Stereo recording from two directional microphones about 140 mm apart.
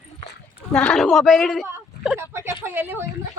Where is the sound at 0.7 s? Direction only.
5° left (ahead or behind).